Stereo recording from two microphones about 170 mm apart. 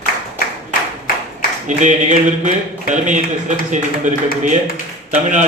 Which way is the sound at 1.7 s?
45° right (ahead or behind).